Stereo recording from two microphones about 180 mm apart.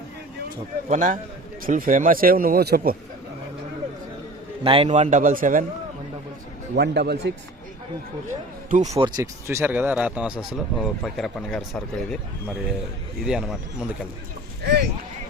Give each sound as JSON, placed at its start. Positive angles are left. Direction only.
{"t": 0.9, "sound": "speech", "side_deg": -45}
{"t": 4.6, "sound": "speech", "side_deg": -30}
{"t": 6.7, "sound": "speech", "side_deg": -65}
{"t": 8.3, "sound": "speech", "side_deg": -45}
{"t": 9.0, "sound": "speech", "side_deg": -20}
{"t": 14.6, "sound": "a sound", "side_deg": -65}